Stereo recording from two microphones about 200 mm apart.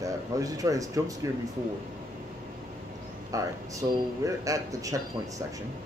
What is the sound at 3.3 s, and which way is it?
Speech, 15° right (ahead or behind).